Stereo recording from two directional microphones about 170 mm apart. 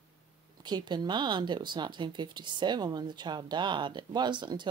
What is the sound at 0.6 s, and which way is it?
Speech, 25° right (ahead or behind).